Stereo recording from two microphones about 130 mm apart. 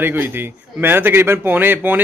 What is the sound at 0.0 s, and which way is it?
A man's voice, 15° right (ahead or behind).